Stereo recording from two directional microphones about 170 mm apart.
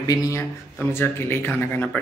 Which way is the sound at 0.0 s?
20° left (ahead or behind).